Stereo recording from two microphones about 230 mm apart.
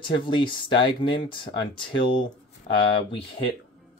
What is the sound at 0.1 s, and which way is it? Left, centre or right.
Speech, left.